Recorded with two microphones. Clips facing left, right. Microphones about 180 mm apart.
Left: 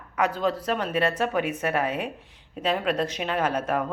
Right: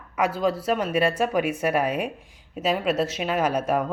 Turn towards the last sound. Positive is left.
turn(degrees=-10)  # may be behind; listen again after turning